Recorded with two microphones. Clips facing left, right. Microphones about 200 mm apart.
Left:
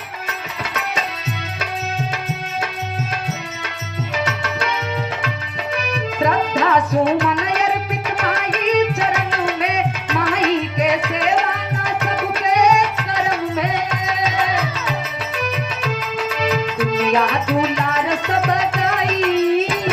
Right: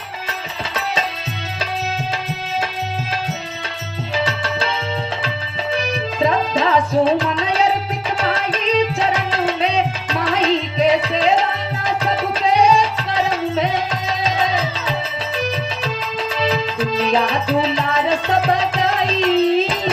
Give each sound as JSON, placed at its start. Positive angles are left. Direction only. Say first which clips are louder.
{"t": 0.7, "sound": "music", "louder": "right 3 dB", "side_deg": -30}
{"t": 4.3, "sound": "music", "louder": "right 1 dB", "side_deg": -30}
{"t": 8.2, "sound": "tabla", "louder": "even", "side_deg": -30}
{"t": 11.9, "sound": "music", "louder": "right 2 dB", "side_deg": -30}